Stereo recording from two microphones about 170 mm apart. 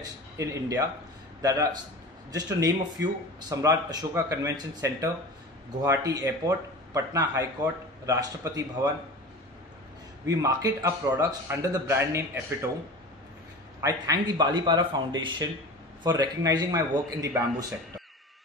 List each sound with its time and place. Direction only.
0.4 s speech: 20° right (ahead or behind)
10.2 s speech: 20° right (ahead or behind)
13.7 s speech: 20° right (ahead or behind)